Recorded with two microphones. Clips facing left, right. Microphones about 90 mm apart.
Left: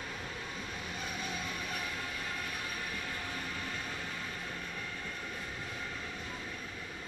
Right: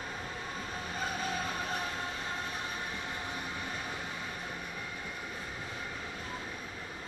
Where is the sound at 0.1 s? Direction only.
35° right (ahead or behind); by 5.1 s 15° right (ahead or behind).